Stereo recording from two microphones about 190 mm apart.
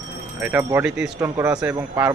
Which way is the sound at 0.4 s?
10° right (ahead or behind).